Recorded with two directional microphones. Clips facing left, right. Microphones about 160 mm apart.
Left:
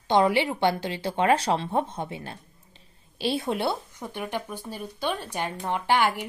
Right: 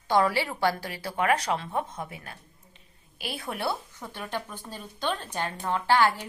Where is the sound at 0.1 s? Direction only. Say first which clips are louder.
Left 3 dB; 20° left (ahead or behind).